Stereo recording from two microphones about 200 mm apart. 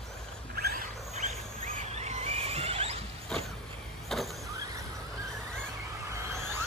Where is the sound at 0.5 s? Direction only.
45° right (ahead or behind).